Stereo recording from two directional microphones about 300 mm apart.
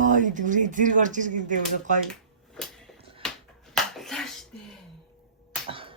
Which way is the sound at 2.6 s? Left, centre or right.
Centre.